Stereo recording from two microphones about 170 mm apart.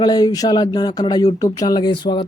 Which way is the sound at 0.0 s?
25° left (ahead or behind).